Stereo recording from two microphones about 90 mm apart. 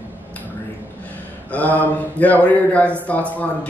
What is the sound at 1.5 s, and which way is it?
A man's voice, 15° left (ahead or behind).